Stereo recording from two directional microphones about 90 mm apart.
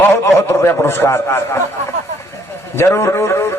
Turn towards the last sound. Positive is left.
turn(degrees=30)  # may be behind; listen again after turning